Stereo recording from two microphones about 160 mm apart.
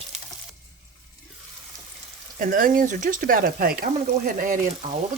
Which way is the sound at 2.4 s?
60° right (ahead or behind).